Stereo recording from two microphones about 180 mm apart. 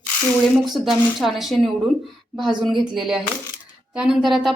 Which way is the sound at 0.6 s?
Centre (ahead or behind).